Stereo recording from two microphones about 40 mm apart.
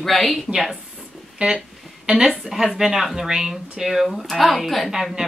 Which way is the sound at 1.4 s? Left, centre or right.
Right.